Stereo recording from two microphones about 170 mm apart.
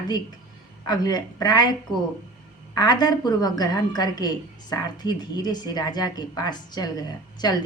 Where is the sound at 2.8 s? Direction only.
25° left (ahead or behind).